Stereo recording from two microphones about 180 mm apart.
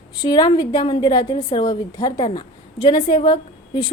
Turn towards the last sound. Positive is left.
turn(degrees=25)  # may be behind; listen again after turning